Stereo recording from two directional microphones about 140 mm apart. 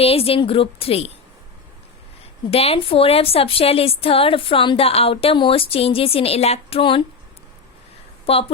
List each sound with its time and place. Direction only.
0.0 s a woman's voice: 45° left (ahead or behind)
2.5 s a woman's voice: 45° left (ahead or behind)
8.3 s a woman's voice: 45° left (ahead or behind)